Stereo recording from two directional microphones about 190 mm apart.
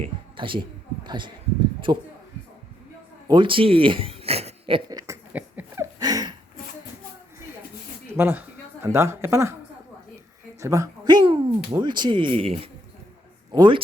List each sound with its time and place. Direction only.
0.0 s a man's voice: 25° right (ahead or behind)
3.2 s a sound: 25° right (ahead or behind)
8.1 s a woman's voice: 10° right (ahead or behind)
10.6 s speech: 15° right (ahead or behind)